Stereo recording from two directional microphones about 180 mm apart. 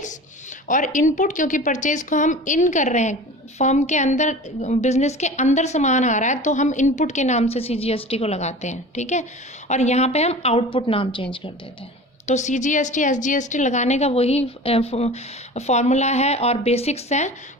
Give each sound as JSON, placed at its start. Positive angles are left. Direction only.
{"t": 0.7, "sound": "a woman's voice", "side_deg": 45}
{"t": 12.2, "sound": "a woman's voice", "side_deg": 40}